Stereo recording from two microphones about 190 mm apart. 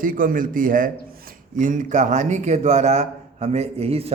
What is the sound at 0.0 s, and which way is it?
A man's voice, 45° right (ahead or behind).